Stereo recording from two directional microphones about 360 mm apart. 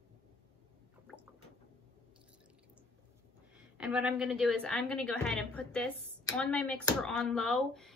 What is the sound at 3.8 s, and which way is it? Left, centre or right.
A woman's voice, centre.